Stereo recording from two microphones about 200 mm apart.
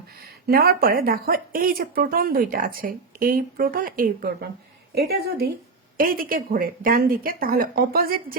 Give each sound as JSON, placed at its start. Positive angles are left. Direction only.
{"t": 0.4, "sound": "speech", "side_deg": -50}